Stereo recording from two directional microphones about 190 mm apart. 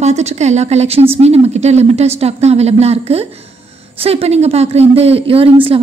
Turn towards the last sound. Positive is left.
turn(degrees=-30)  # may be behind; listen again after turning